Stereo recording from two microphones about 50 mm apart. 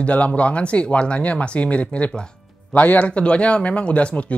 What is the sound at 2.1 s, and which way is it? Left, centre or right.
Music, centre.